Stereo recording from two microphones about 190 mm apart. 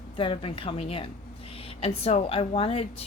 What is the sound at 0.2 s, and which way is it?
A woman's voice, 30° left (ahead or behind).